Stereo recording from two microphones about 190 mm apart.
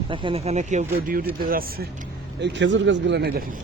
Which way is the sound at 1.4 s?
50° right (ahead or behind).